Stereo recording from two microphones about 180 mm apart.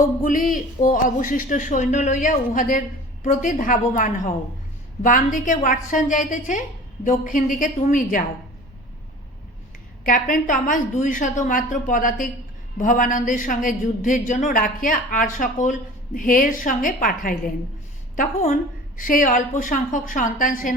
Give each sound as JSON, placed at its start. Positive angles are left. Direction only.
{"t": 0.0, "sound": "a woman's voice", "side_deg": 50}
{"t": 10.0, "sound": "a woman's voice", "side_deg": 50}
{"t": 18.9, "sound": "a woman's voice", "side_deg": 50}